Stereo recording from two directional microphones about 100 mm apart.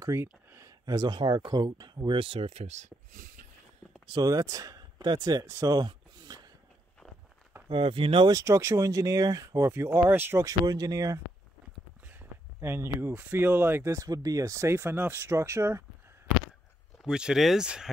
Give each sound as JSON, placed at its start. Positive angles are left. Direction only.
{"t": 0.0, "sound": "speech", "side_deg": -25}
{"t": 2.1, "sound": "speech", "side_deg": -70}
{"t": 4.1, "sound": "speech", "side_deg": -40}
{"t": 5.4, "sound": "speech", "side_deg": -25}
{"t": 5.7, "sound": "a sound", "side_deg": -40}
{"t": 7.6, "sound": "speech", "side_deg": -65}
{"t": 8.3, "sound": "speech", "side_deg": -30}
{"t": 10.7, "sound": "speech", "side_deg": -35}
{"t": 12.1, "sound": "speech", "side_deg": -20}
{"t": 17.0, "sound": "speech", "side_deg": -5}